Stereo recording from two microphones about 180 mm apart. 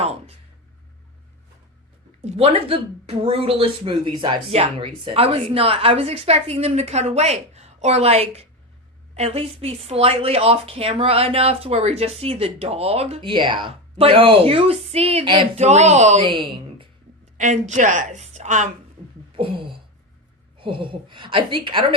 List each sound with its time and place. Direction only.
0.0 s a sound: 35° right (ahead or behind)
2.2 s a woman's voice: 35° right (ahead or behind)
16.2 s speech: 25° right (ahead or behind)
17.3 s a woman's voice: 45° right (ahead or behind)
19.4 s a sound: 30° right (ahead or behind)
20.6 s a woman's voice: 30° right (ahead or behind)